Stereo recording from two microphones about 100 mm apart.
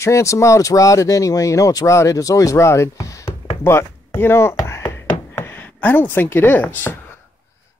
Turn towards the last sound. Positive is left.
turn(degrees=20)  # may be behind; listen again after turning